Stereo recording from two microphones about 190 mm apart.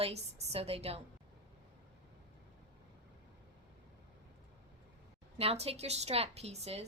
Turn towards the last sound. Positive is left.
turn(degrees=-35)  # may be behind; listen again after turning